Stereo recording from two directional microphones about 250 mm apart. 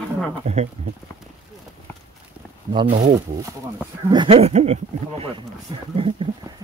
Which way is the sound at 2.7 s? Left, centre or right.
Right.